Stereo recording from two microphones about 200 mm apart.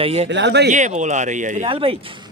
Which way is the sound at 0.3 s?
60° right (ahead or behind).